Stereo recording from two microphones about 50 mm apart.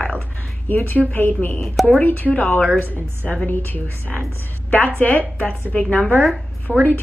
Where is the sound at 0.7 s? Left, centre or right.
Left.